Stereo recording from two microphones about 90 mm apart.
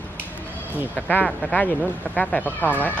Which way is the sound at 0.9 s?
20° left (ahead or behind).